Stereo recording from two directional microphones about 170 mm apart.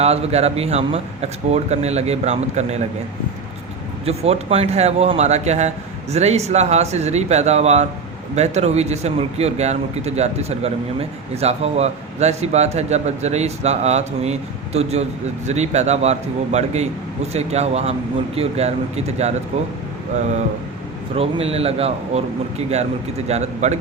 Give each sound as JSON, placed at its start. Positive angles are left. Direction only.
{"t": 0.0, "sound": "speech", "side_deg": -40}
{"t": 4.0, "sound": "speech", "side_deg": -40}
{"t": 21.2, "sound": "speech", "side_deg": -35}